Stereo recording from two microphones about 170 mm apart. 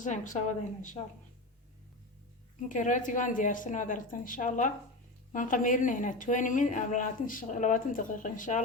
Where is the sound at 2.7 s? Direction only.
50° left (ahead or behind).